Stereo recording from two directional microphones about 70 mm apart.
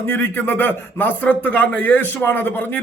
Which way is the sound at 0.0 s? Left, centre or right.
Left.